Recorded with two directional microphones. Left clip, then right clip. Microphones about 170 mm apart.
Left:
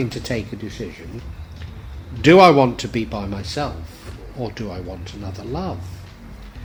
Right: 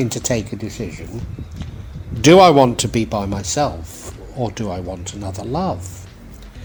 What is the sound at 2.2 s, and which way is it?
Speech, 40° right (ahead or behind).